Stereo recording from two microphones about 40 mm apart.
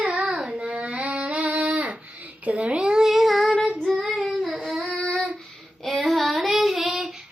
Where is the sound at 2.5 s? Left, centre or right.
Right.